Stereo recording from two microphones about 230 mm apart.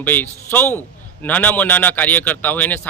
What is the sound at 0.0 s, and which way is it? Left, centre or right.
Speech, centre.